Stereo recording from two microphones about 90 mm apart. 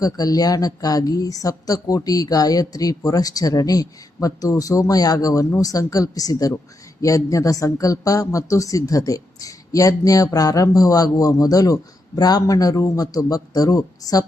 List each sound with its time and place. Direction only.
0.0 s speech: 45° left (ahead or behind)